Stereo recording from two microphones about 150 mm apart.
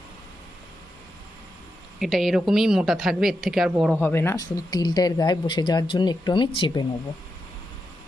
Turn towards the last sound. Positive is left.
turn(degrees=35)  # may be behind; listen again after turning